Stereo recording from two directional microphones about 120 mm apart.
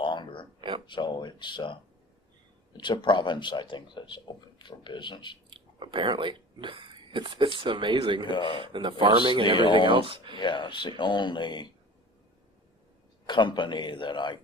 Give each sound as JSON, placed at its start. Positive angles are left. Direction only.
{"t": 0.0, "sound": "a sound", "side_deg": 40}
{"t": 0.9, "sound": "speech", "side_deg": 40}
{"t": 5.5, "sound": "speech", "side_deg": -45}
{"t": 8.3, "sound": "speech", "side_deg": 45}
{"t": 8.6, "sound": "speech", "side_deg": -40}
{"t": 9.6, "sound": "speech", "side_deg": 40}
{"t": 9.8, "sound": "speech", "side_deg": -45}
{"t": 10.3, "sound": "speech", "side_deg": 40}
{"t": 13.2, "sound": "speech", "side_deg": 40}